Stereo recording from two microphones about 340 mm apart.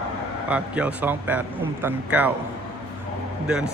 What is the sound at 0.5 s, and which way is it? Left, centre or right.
A man's voice, centre.